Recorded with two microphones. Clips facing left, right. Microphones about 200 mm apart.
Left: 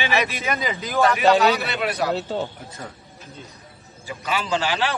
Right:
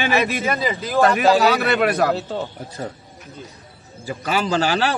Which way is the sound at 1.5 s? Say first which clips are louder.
Right 6 dB; 55° right (ahead or behind).